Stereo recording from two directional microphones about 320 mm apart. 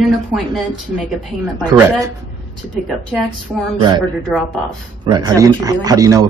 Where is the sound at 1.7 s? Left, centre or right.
Centre.